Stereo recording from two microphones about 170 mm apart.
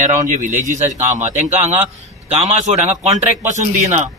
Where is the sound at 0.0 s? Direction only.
45° right (ahead or behind).